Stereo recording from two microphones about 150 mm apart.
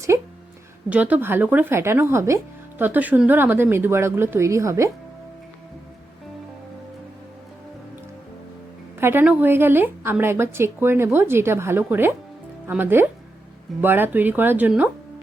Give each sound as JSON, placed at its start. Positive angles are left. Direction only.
{"t": 0.9, "sound": "speech", "side_deg": -10}
{"t": 9.0, "sound": "speech", "side_deg": -15}